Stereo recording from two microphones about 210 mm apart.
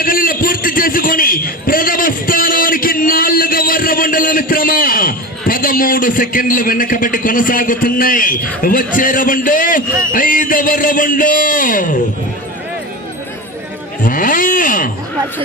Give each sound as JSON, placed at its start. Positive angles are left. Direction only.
{"t": 0.0, "sound": "a sound", "side_deg": 45}
{"t": 10.1, "sound": "a man's voice", "side_deg": 40}
{"t": 14.0, "sound": "a man's voice", "side_deg": 40}